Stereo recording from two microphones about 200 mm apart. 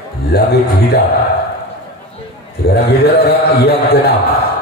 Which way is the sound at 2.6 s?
55° left (ahead or behind).